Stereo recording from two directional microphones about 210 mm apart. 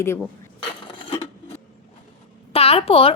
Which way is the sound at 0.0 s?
10° left (ahead or behind).